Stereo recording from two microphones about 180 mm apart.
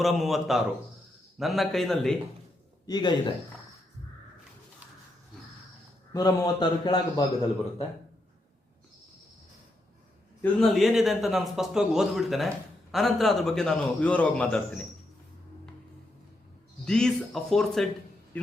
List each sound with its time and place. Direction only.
0.0 s a man's voice: centre (ahead or behind)
2.8 s a man's voice: 25° left (ahead or behind)
6.1 s a man's voice: 20° left (ahead or behind)
10.4 s a man's voice: centre (ahead or behind)
16.8 s a man's voice: 5° left (ahead or behind)